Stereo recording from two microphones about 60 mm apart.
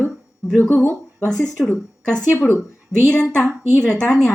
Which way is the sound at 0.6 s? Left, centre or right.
Left.